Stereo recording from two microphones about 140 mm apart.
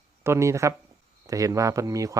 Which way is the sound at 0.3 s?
20° right (ahead or behind).